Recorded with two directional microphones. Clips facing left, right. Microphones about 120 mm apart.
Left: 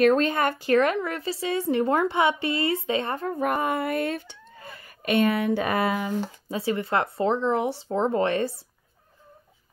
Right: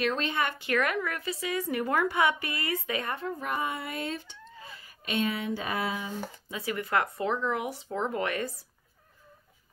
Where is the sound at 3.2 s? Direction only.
55° left (ahead or behind).